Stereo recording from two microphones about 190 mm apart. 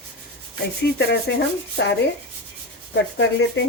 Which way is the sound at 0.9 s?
60° left (ahead or behind).